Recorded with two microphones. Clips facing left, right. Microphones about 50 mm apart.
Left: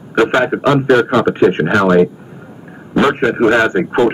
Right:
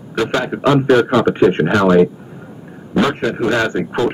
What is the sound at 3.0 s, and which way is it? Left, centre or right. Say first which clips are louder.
Speech: left 5 dB; left.